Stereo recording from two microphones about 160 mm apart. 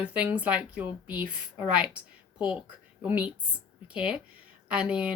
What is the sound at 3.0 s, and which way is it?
A woman's voice, 10° right (ahead or behind).